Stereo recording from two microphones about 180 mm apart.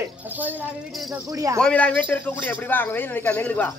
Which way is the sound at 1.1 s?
20° right (ahead or behind).